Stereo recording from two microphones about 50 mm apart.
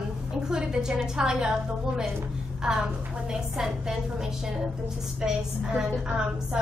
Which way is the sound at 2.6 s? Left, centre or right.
Centre.